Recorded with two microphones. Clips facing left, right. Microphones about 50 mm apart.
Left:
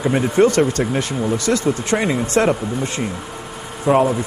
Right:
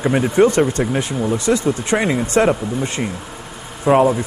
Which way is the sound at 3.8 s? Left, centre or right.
Centre.